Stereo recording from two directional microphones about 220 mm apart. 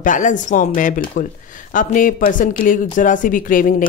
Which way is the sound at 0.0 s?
35° left (ahead or behind).